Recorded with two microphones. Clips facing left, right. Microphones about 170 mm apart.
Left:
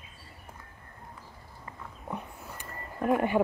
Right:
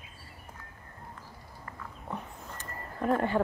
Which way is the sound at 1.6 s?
15° left (ahead or behind).